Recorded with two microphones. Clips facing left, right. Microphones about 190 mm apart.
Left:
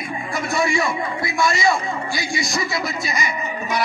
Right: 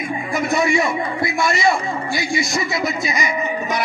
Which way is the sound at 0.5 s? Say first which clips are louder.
Right 2 dB; 20° right (ahead or behind).